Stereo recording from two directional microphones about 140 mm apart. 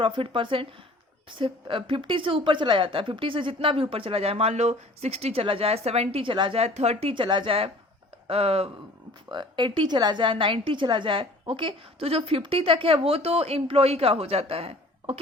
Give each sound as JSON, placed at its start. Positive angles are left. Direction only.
{"t": 0.0, "sound": "a woman's voice", "side_deg": -40}
{"t": 9.3, "sound": "a woman's voice", "side_deg": -35}